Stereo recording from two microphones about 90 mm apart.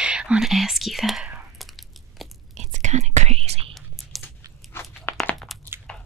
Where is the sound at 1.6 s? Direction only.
Centre (ahead or behind).